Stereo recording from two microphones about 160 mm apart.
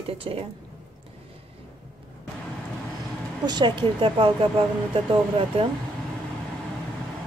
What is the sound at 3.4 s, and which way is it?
Speech, 25° right (ahead or behind).